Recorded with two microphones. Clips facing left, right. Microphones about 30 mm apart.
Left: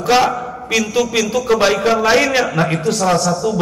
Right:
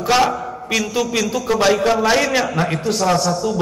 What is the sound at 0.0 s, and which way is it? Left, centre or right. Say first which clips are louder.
A man's voice: left 2 dB; centre.